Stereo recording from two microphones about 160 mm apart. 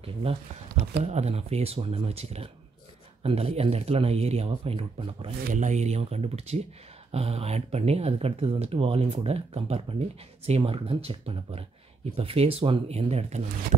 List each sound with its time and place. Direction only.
0.0 s speech: 35° right (ahead or behind)
5.4 s speech: 50° right (ahead or behind)